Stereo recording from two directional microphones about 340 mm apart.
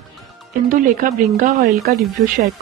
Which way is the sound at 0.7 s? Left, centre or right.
Right.